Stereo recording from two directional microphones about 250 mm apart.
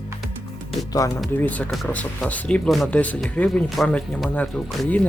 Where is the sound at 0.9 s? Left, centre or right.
Centre.